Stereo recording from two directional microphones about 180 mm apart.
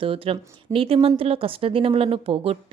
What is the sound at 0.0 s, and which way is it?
Speech, 30° right (ahead or behind).